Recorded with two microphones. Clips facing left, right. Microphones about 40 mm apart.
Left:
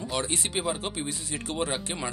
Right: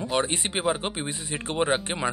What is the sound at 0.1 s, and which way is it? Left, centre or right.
Speech, right.